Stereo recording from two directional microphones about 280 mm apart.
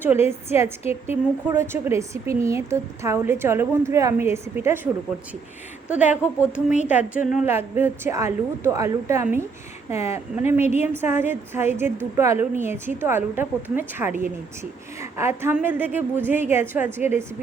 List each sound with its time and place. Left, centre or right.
0.0 s speech: centre
5.9 s a woman's voice: centre
7.3 s speech: centre